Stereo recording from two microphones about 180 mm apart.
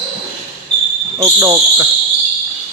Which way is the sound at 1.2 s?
15° right (ahead or behind).